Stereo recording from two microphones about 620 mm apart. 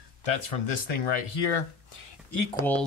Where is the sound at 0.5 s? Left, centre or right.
Left.